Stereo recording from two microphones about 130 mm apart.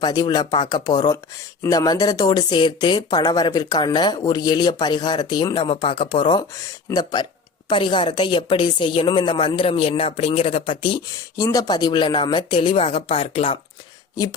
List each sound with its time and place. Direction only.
0.0 s speech: 30° left (ahead or behind); by 13.6 s 50° left (ahead or behind)